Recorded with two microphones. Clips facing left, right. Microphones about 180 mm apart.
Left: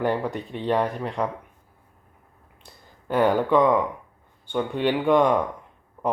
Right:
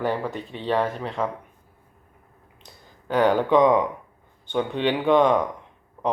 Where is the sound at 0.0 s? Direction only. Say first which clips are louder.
Left 1 dB; 15° left (ahead or behind).